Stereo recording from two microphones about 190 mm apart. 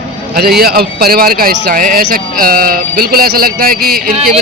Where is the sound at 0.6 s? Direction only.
55° right (ahead or behind).